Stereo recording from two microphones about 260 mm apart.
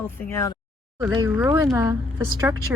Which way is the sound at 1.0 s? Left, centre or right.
Centre.